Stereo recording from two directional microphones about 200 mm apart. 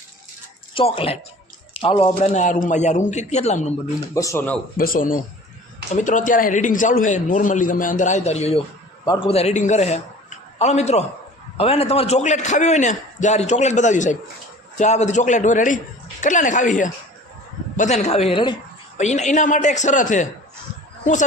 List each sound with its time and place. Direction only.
0.7 s a man's voice: 25° left (ahead or behind)
4.1 s speech: 15° left (ahead or behind)
4.8 s a man's voice: 45° left (ahead or behind)